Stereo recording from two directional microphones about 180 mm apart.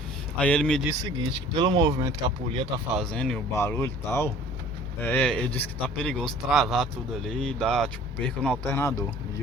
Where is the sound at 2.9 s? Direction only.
5° left (ahead or behind).